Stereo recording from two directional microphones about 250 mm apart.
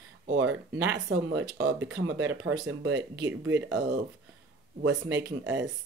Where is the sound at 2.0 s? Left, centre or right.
Right.